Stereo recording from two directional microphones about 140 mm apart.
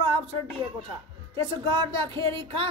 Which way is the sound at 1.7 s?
40° right (ahead or behind).